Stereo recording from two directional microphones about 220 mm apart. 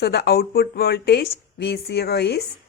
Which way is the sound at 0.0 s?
45° left (ahead or behind).